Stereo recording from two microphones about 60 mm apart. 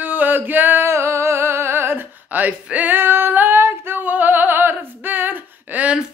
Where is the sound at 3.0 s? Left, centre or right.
Right.